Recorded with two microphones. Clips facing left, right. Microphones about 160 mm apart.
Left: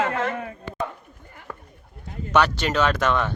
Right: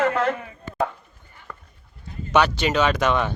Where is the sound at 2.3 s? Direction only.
10° right (ahead or behind).